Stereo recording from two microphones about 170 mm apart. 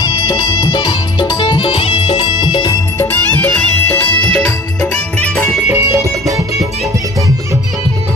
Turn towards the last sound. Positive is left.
turn(degrees=-20)  # may be behind; listen again after turning